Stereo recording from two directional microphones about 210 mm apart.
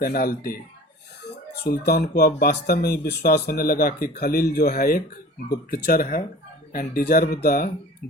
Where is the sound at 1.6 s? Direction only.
50° left (ahead or behind).